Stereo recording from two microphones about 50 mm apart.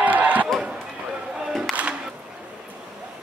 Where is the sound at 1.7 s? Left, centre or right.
Centre.